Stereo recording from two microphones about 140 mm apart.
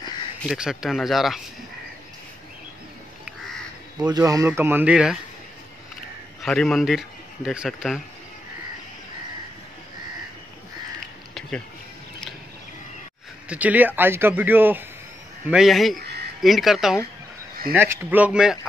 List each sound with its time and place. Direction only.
0.5 s speech: 5° right (ahead or behind)
4.0 s a man's voice: 25° right (ahead or behind); by 5.1 s 10° right (ahead or behind)
6.4 s speech: centre (ahead or behind)
13.5 s a man's voice: 10° right (ahead or behind)
15.4 s speech: 5° right (ahead or behind)
17.7 s a man's voice: 15° right (ahead or behind)